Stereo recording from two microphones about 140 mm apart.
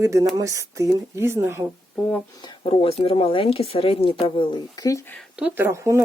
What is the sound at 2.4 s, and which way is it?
Speech, 35° left (ahead or behind).